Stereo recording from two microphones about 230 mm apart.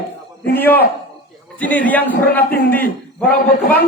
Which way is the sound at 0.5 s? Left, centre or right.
Centre.